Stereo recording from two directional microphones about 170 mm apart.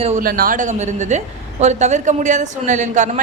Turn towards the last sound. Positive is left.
turn(degrees=-45)  # may be behind; listen again after turning